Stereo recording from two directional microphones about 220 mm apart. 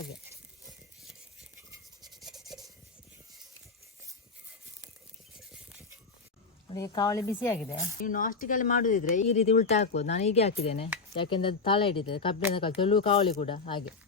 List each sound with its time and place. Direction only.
2.0 s rub: centre (ahead or behind)
6.7 s speech: 15° left (ahead or behind)
8.0 s speech: 40° left (ahead or behind)